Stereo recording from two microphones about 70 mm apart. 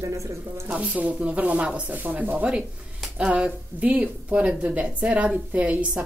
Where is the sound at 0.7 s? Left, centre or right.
Centre.